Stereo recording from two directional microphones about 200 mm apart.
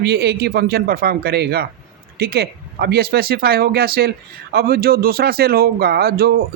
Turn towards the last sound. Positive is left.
turn(degrees=-50)  # may be behind; listen again after turning